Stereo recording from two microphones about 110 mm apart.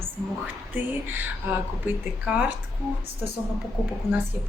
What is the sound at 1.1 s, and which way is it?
A woman's voice, 15° right (ahead or behind).